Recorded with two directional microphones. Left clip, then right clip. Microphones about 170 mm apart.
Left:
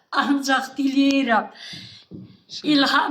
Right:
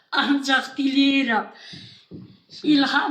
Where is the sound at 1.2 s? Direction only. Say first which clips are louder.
Left 3 dB; 30° left (ahead or behind).